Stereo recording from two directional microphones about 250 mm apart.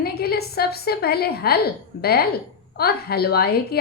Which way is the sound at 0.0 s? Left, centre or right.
Left.